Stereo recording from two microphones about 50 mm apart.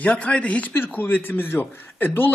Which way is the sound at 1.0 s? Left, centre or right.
Left.